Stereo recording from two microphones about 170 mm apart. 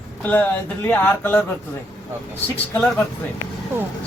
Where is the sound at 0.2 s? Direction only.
10° left (ahead or behind).